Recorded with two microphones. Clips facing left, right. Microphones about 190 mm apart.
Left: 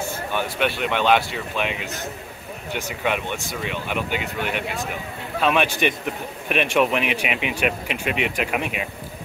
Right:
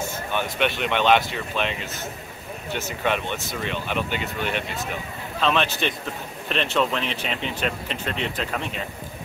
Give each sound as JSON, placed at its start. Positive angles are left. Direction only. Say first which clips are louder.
{"t": 0.3, "sound": "a man's voice", "louder": "even", "side_deg": 10}